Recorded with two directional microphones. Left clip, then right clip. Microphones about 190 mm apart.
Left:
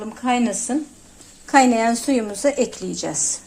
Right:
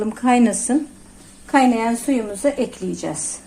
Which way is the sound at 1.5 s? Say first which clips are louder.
Left 1 dB; 25° left (ahead or behind).